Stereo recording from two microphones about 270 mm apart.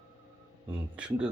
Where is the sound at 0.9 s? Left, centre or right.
Centre.